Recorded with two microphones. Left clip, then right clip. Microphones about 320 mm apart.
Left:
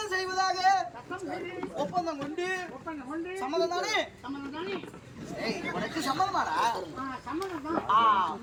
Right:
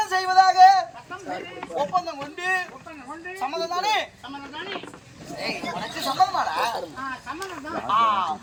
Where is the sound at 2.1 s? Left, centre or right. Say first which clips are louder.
Right 6 dB; centre.